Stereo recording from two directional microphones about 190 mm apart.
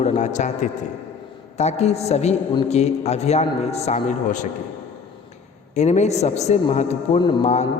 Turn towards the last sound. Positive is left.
turn(degrees=40)  # may be behind; listen again after turning